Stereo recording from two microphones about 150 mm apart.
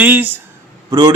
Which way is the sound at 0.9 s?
30° right (ahead or behind).